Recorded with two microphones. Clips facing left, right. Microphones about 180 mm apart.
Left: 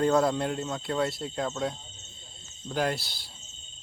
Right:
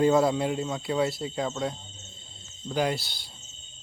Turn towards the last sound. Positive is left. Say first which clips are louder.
# right 2 dB
turn(degrees=0)  # may be behind; listen again after turning